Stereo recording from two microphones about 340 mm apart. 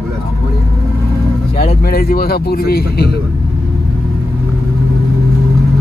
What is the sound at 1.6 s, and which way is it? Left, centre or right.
Speech, left.